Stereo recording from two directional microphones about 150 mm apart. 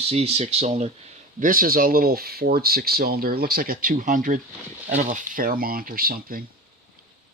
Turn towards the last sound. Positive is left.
turn(degrees=-75)  # may be behind; listen again after turning